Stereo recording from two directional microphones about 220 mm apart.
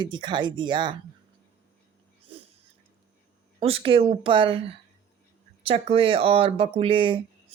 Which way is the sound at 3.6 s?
25° right (ahead or behind).